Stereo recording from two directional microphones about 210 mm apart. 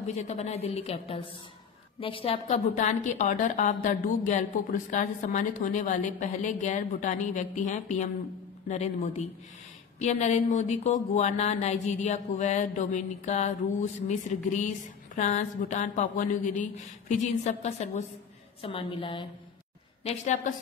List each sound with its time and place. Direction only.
0.0 s a woman's voice: 35° left (ahead or behind)
20.1 s speech: 35° left (ahead or behind)